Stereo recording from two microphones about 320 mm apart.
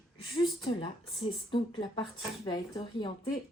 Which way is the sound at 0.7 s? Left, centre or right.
Centre.